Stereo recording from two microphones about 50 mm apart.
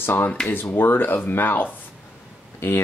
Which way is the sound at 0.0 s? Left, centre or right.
Left.